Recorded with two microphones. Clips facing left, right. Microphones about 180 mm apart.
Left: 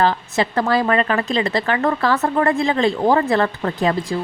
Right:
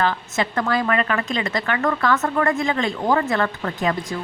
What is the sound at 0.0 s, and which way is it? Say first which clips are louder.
Speech: left 4 dB; 35° left (ahead or behind).